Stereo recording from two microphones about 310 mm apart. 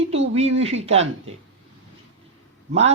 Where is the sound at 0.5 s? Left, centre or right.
Centre.